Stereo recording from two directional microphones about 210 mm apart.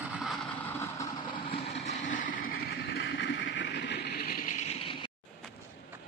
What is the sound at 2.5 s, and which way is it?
Vehicle, 50° left (ahead or behind).